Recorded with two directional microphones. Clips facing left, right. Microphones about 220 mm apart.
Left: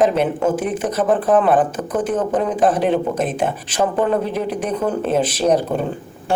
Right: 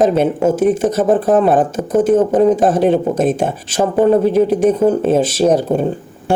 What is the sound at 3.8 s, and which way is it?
Speech, 20° right (ahead or behind).